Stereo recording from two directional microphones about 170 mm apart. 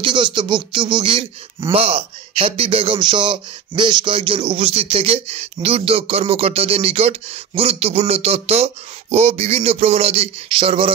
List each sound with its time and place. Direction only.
0.0 s speech: 30° right (ahead or behind)